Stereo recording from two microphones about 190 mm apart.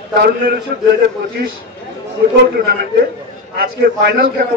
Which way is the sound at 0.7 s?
55° right (ahead or behind).